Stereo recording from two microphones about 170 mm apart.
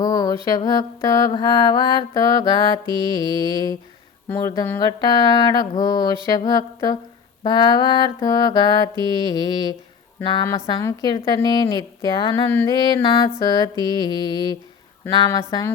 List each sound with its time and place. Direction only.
0.0 s a sound: 20° left (ahead or behind)
0.4 s mantra: 20° left (ahead or behind)
4.3 s speech: 15° left (ahead or behind)
4.8 s mantra: 25° left (ahead or behind)
12.5 s speech: 10° left (ahead or behind)
12.7 s mantra: 25° left (ahead or behind)
15.4 s speech: 15° left (ahead or behind)